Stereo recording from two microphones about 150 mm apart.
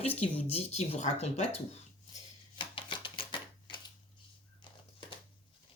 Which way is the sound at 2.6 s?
35° left (ahead or behind).